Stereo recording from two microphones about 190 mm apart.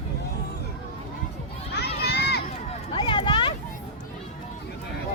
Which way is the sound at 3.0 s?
25° left (ahead or behind).